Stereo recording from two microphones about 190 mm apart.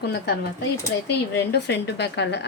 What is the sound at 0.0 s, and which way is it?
Speech, 60° left (ahead or behind).